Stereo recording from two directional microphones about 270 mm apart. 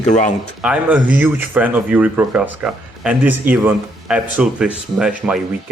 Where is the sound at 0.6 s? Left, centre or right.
Centre.